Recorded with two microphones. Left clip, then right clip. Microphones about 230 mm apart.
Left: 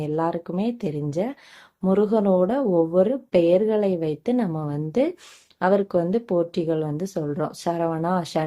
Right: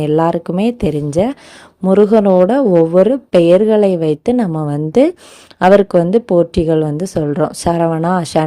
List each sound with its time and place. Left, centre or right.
0.0 s a woman's voice: right